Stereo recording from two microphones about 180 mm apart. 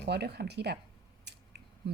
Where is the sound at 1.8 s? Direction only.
60° right (ahead or behind).